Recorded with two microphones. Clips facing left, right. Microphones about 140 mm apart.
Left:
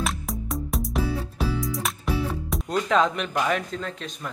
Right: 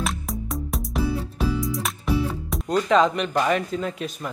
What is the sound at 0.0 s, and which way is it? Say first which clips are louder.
Music: right 1 dB; centre (ahead or behind).